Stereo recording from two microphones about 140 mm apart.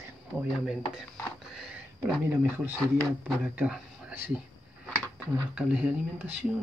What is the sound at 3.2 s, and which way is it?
Speech, 10° right (ahead or behind).